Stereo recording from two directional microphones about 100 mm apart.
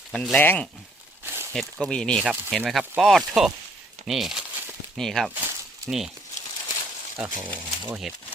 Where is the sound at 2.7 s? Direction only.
Centre (ahead or behind).